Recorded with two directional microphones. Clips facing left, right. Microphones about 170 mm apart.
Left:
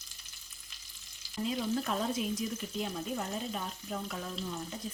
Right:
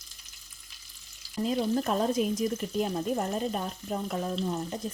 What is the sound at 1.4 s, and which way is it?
Speech, 45° right (ahead or behind).